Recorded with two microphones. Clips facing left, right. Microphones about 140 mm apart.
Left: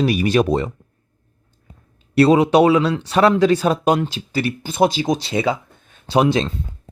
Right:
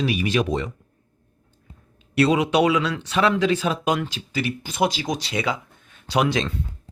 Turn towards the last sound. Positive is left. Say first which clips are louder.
# left 5 dB
turn(degrees=30)  # may be behind; listen again after turning